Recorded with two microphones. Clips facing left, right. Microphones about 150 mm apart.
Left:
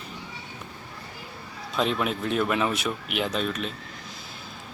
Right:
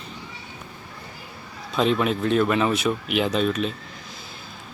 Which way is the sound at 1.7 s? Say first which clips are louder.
Right 5 dB; centre (ahead or behind).